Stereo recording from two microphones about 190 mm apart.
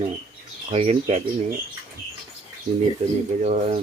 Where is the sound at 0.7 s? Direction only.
30° right (ahead or behind).